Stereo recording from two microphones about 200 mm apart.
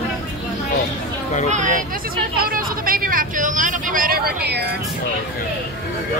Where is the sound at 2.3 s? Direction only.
45° right (ahead or behind).